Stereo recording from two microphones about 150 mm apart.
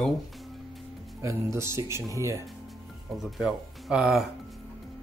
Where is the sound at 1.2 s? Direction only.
20° right (ahead or behind).